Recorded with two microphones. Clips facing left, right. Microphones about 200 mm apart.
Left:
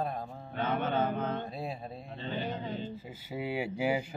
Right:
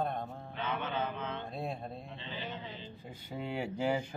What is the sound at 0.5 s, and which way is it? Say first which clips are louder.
Music: left 6 dB; 45° left (ahead or behind).